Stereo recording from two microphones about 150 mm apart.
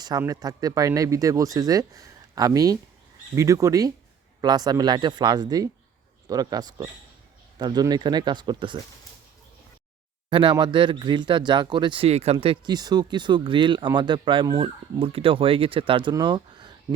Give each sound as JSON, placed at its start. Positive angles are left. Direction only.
{"t": 0.0, "sound": "speech", "side_deg": -25}
{"t": 10.2, "sound": "speech", "side_deg": -30}